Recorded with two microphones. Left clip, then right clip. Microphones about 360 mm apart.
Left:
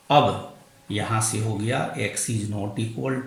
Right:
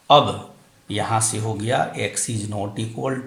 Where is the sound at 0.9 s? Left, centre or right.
Centre.